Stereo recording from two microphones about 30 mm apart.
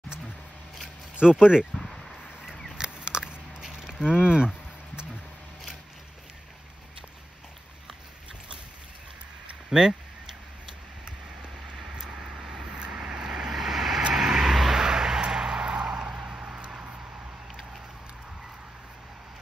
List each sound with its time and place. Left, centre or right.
1.2 s speech: right
1.8 s a sound: centre
2.8 s biting: right
9.7 s speech: right
11.8 s vehicle: right
12.6 s vehicle: right
13.6 s vehicle: centre
15.7 s vehicle: right
16.3 s a sound: right